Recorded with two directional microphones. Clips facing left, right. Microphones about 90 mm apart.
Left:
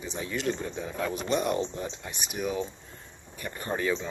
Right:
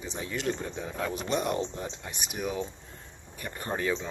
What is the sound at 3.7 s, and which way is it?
Speech, 35° right (ahead or behind).